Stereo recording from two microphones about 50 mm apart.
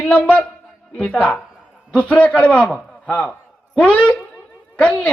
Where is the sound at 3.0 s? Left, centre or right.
Left.